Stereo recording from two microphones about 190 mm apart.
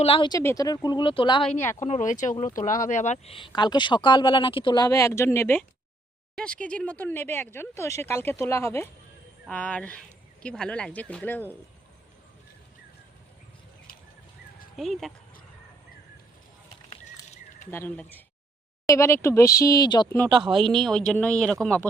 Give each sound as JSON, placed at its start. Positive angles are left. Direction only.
{"t": 0.0, "sound": "speech", "side_deg": 25}
{"t": 1.5, "sound": "speech", "side_deg": 10}
{"t": 1.8, "sound": "a man's voice", "side_deg": 40}
{"t": 14.8, "sound": "a man's voice", "side_deg": 0}
{"t": 16.9, "sound": "a sound", "side_deg": 35}
{"t": 17.7, "sound": "speech", "side_deg": 10}
{"t": 20.2, "sound": "speech", "side_deg": -25}
{"t": 20.7, "sound": "a man's voice", "side_deg": 0}